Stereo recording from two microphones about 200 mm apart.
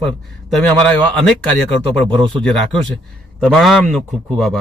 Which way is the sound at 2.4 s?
5° left (ahead or behind).